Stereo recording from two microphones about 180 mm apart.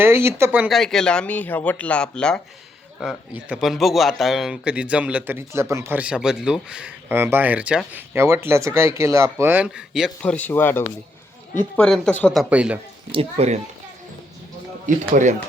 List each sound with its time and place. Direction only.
0.0 s speech: 15° right (ahead or behind)
10.3 s speech: 10° left (ahead or behind); by 12.8 s 5° right (ahead or behind)
13.1 s speech: 30° right (ahead or behind)
14.8 s speech: 45° right (ahead or behind)